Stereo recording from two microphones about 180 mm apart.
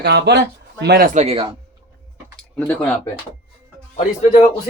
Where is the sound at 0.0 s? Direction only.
70° right (ahead or behind); by 1.5 s 35° right (ahead or behind).